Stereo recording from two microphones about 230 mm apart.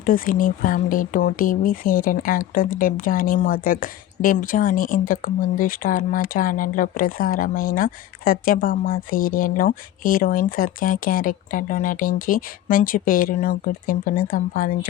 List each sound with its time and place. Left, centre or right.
0.0 s speech: left